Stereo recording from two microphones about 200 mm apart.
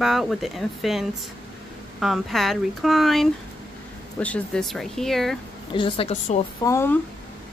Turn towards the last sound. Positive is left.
turn(degrees=15)  # may be behind; listen again after turning